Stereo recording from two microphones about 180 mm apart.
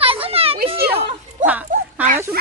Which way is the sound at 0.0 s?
30° right (ahead or behind).